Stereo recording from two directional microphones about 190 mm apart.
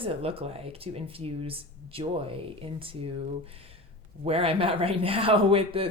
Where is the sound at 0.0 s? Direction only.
30° right (ahead or behind).